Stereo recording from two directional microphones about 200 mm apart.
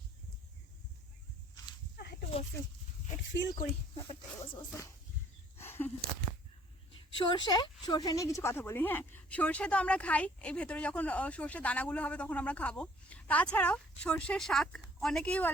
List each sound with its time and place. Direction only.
3.9 s speech: 20° left (ahead or behind)
5.5 s a sound: 10° left (ahead or behind)
6.9 s a woman's voice: 20° left (ahead or behind); by 15.4 s 5° left (ahead or behind)